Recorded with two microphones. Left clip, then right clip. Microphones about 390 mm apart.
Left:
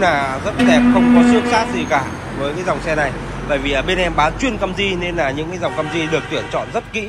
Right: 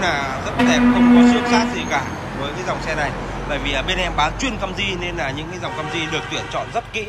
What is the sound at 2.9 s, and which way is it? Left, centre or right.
A man's voice, centre.